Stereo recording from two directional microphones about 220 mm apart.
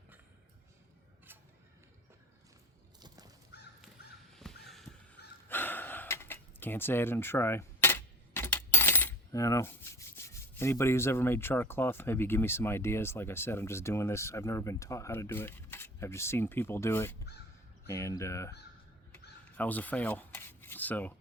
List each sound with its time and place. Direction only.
3.5 s crow: 50° left (ahead or behind)
4.4 s crow: centre (ahead or behind)
5.5 s speech: 10° left (ahead or behind)
19.5 s filing: 5° left (ahead or behind)